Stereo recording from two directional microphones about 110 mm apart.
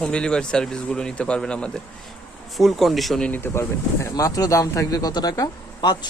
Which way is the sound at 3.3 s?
20° left (ahead or behind).